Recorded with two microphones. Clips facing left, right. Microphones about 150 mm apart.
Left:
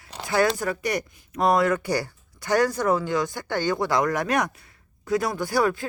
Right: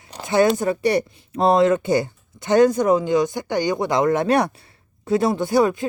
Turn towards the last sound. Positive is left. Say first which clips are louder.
# right 5 dB
turn(degrees=-20)  # may be behind; listen again after turning